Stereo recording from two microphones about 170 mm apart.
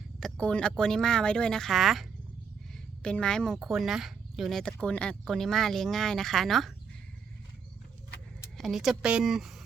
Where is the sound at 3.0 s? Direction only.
5° left (ahead or behind).